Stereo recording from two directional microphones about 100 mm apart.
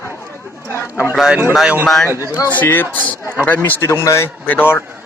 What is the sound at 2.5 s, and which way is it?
A man's voice, 20° left (ahead or behind).